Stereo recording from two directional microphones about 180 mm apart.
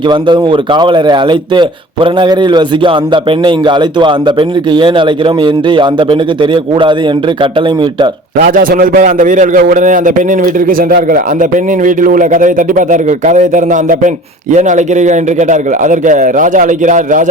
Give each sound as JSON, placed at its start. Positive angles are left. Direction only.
{"t": 0.1, "sound": "a man's voice", "side_deg": -25}
{"t": 8.4, "sound": "a man's voice", "side_deg": -50}